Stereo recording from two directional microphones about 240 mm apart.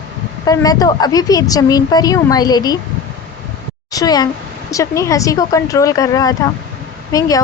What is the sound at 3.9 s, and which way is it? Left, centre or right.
A woman's voice, centre.